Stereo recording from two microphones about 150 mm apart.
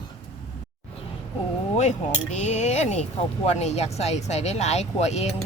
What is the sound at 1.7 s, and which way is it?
Speech, 50° left (ahead or behind).